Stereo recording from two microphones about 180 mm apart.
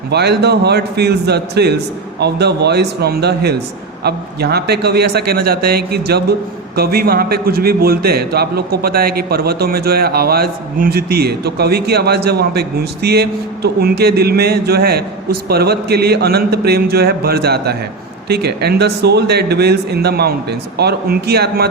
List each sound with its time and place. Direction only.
0.1 s a man's voice: 65° right (ahead or behind)